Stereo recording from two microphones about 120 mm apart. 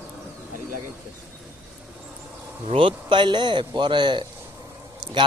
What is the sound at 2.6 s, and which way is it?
A man's voice, 50° right (ahead or behind).